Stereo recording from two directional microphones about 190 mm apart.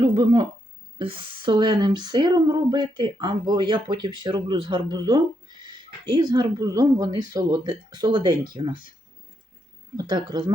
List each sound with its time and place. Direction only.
0.0 s speech: 25° right (ahead or behind)
10.0 s speech: 20° right (ahead or behind)